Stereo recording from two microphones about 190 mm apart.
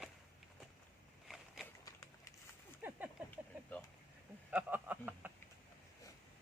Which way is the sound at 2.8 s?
10° right (ahead or behind).